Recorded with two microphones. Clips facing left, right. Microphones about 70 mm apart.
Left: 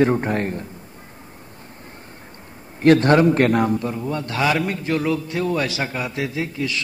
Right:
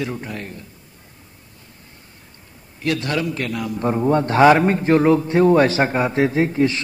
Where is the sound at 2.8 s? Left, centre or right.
Left.